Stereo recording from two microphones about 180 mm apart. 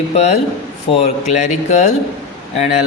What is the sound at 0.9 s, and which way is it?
Speech, 35° left (ahead or behind).